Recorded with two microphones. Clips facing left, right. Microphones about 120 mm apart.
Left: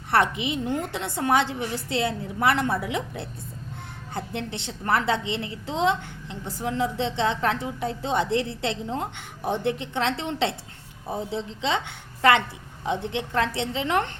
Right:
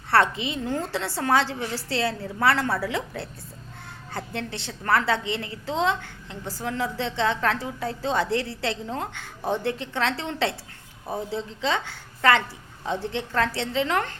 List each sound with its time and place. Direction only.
0.1 s a woman's voice: 20° left (ahead or behind)